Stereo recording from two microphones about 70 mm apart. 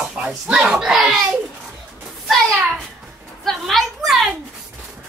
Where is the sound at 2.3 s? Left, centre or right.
Centre.